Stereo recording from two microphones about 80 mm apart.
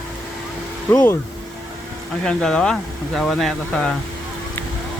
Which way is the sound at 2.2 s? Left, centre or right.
Centre.